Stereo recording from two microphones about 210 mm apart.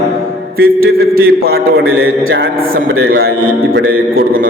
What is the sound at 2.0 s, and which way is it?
Mantra, 70° right (ahead or behind).